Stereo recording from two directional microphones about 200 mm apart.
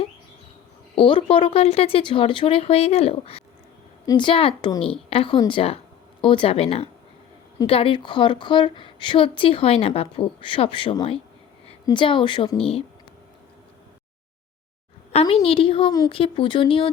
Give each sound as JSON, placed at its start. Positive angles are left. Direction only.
{"t": 0.9, "sound": "a woman's voice", "side_deg": 25}
{"t": 15.1, "sound": "a woman's voice", "side_deg": 30}